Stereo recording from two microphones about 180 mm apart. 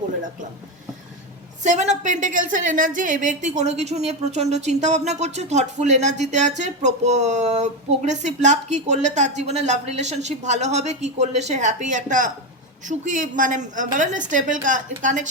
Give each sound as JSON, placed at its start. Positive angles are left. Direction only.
{"t": 1.6, "sound": "a woman's voice", "side_deg": -40}